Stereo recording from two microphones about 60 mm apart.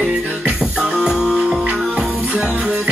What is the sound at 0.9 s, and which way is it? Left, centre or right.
Music, centre.